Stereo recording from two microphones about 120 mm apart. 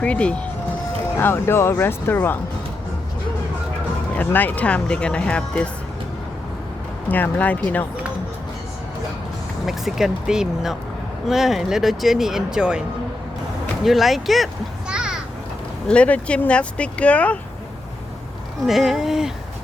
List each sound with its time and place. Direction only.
0.0 s speech: 10° left (ahead or behind)
4.1 s speech: 15° left (ahead or behind)
7.1 s speech: 15° left (ahead or behind)
9.6 s speech: centre (ahead or behind)
13.8 s a child's voice: centre (ahead or behind)
15.9 s speech: 10° left (ahead or behind)
18.6 s speech: centre (ahead or behind)